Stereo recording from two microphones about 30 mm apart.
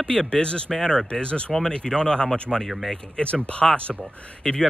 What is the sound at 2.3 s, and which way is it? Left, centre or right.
Speech, centre.